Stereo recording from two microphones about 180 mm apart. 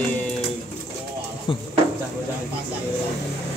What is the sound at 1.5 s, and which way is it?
Speech, 30° left (ahead or behind).